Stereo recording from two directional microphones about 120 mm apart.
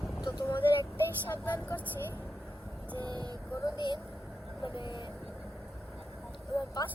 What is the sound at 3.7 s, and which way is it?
Speech, 40° left (ahead or behind).